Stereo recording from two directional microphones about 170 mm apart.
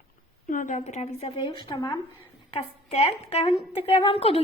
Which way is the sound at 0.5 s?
50° left (ahead or behind).